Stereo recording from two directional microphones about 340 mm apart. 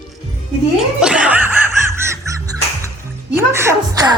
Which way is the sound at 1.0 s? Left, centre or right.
Centre.